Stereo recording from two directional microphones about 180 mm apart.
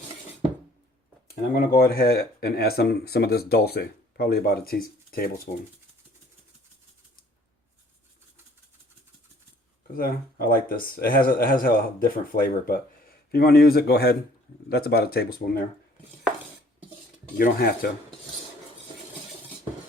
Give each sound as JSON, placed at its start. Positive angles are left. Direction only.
{"t": 1.5, "sound": "speech", "side_deg": 55}
{"t": 9.9, "sound": "speech", "side_deg": 55}
{"t": 17.3, "sound": "speech", "side_deg": 55}